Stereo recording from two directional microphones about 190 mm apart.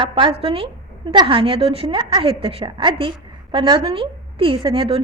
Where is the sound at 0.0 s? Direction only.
25° right (ahead or behind).